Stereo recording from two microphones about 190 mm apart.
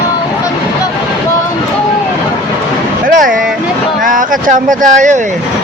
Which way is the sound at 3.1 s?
45° right (ahead or behind).